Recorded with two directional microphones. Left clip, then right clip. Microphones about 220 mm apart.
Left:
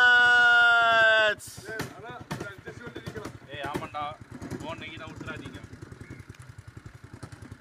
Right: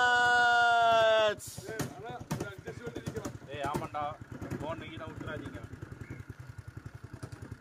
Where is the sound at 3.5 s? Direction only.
50° right (ahead or behind).